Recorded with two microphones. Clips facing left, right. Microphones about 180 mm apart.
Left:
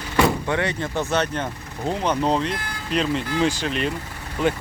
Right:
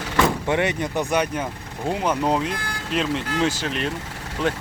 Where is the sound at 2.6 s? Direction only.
80° right.